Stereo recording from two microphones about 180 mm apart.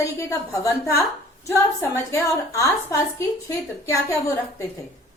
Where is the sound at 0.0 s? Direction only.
15° left (ahead or behind).